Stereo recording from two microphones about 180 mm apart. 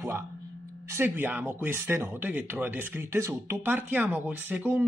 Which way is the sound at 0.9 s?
10° right (ahead or behind).